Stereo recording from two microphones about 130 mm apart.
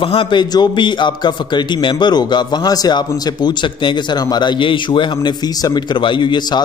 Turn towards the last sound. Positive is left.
turn(degrees=35)  # may be behind; listen again after turning